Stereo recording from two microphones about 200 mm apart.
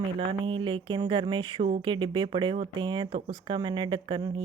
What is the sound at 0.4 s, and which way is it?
Speech, 25° right (ahead or behind).